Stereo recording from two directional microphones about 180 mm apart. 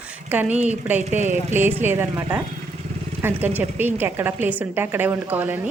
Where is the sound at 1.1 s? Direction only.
40° right (ahead or behind).